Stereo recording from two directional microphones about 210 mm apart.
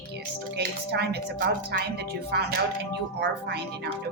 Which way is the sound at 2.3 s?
50° right (ahead or behind).